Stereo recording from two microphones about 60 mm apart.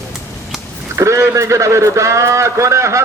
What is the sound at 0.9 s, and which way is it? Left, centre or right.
A man's voice, right.